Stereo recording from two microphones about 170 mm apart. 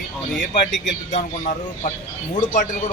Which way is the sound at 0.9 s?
45° left (ahead or behind).